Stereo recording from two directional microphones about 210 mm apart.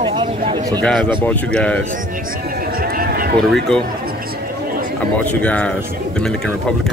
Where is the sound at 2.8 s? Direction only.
45° right (ahead or behind).